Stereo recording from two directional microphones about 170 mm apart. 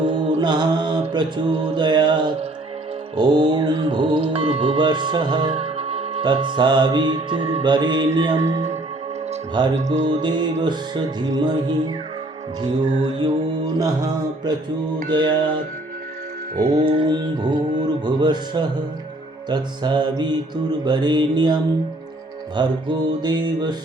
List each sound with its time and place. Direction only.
0.0 s mantra: 25° right (ahead or behind)
3.2 s music: 25° right (ahead or behind)
8.4 s speech: 40° right (ahead or behind)
9.7 s music: 45° right (ahead or behind)
10.1 s music: 25° right (ahead or behind)
13.1 s music: 25° right (ahead or behind)
16.7 s music: 30° right (ahead or behind)